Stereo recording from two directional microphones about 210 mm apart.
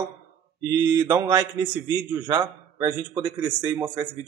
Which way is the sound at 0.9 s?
15° right (ahead or behind).